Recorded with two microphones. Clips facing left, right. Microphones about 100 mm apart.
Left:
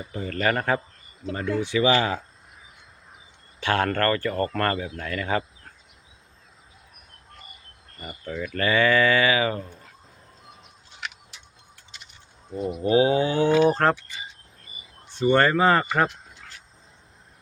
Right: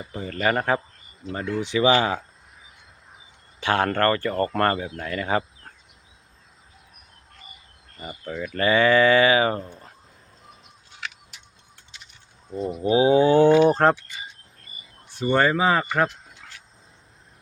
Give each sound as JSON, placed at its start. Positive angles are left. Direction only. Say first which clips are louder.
{"t": 0.0, "sound": "speech", "louder": "right 1 dB", "side_deg": -15}
{"t": 3.6, "sound": "speech", "louder": "right 2 dB", "side_deg": -20}
{"t": 7.9, "sound": "speech", "louder": "right 1 dB", "side_deg": -5}
{"t": 8.5, "sound": "speech", "louder": "right 3 dB", "side_deg": -25}
{"t": 12.8, "sound": "speech", "louder": "right 3 dB", "side_deg": -20}
{"t": 13.7, "sound": "speech", "louder": "right 2 dB", "side_deg": -20}
{"t": 15.2, "sound": "speech", "louder": "left 1 dB", "side_deg": -10}
{"t": 16.4, "sound": "cricket", "louder": "right 1 dB", "side_deg": -5}